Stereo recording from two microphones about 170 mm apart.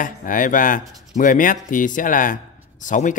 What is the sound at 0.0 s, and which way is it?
Speech, 50° left (ahead or behind).